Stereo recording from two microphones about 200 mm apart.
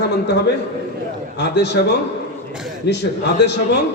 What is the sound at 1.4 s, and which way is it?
Speech, 60° left (ahead or behind).